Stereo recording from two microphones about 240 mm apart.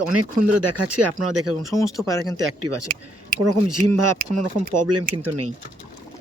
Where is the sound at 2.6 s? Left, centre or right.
Right.